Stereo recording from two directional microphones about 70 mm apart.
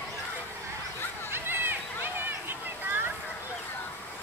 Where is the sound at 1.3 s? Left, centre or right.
Right.